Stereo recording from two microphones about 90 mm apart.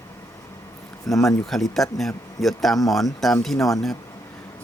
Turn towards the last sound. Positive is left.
turn(degrees=0)  # may be behind; listen again after turning